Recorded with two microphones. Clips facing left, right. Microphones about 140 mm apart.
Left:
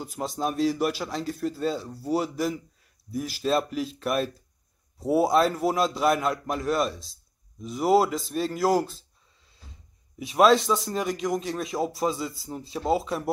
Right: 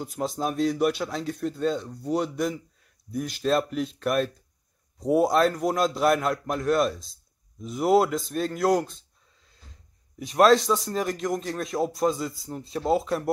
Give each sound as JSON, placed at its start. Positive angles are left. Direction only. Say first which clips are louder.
{"t": 0.0, "sound": "speech", "louder": "right 1 dB", "side_deg": 0}